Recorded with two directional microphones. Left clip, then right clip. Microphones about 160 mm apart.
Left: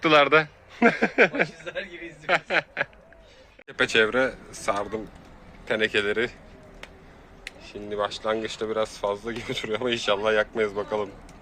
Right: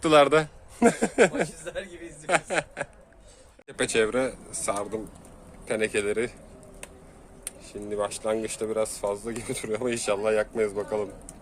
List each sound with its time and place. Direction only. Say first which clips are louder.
0.0 s a man's voice: left 1 dB; 10° right (ahead or behind)
7.7 s a man's voice: left 1 dB; 25° right (ahead or behind)